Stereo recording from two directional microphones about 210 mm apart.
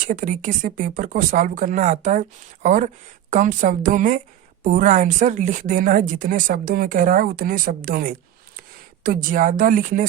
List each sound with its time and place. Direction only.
0.0 s speech: 40° right (ahead or behind)